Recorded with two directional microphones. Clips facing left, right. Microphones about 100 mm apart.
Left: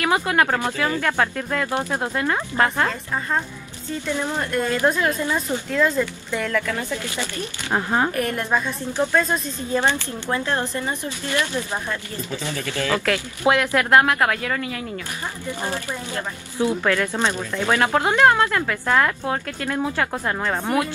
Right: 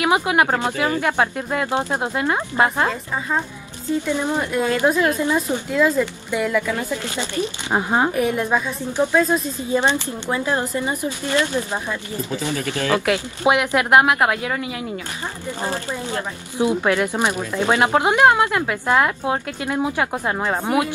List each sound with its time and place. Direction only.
0.0 s speech: 15° right (ahead or behind)
2.9 s speech: 5° right (ahead or behind)
8.1 s a woman's voice: centre (ahead or behind)
8.9 s speech: 15° right (ahead or behind)
9.2 s a woman's voice: 5° right (ahead or behind)
9.8 s speech: 20° right (ahead or behind)
15.9 s speech: 15° right (ahead or behind)